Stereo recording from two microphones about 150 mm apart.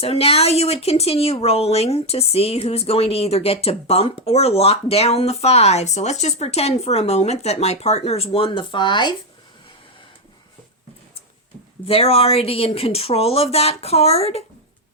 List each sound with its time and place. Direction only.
0.0 s speech: 40° left (ahead or behind)
11.9 s speech: 40° left (ahead or behind)